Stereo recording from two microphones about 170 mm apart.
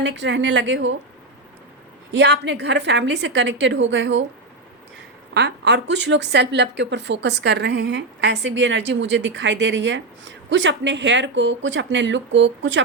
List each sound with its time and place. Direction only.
0.0 s a woman's voice: 90° right
2.1 s a woman's voice: 90° right
5.3 s a woman's voice: 80° right